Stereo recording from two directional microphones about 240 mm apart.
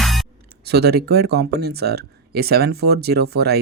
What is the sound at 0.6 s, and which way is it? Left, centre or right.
Speech, right.